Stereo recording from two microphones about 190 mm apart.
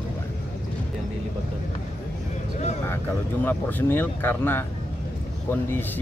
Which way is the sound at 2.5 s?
40° left (ahead or behind).